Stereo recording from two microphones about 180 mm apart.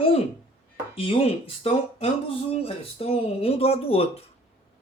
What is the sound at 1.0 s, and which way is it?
Speech, 30° left (ahead or behind).